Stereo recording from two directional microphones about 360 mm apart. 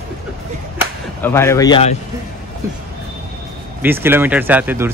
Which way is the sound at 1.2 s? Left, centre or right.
Centre.